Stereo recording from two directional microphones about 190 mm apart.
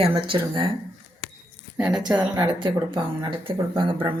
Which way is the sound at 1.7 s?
5° right (ahead or behind).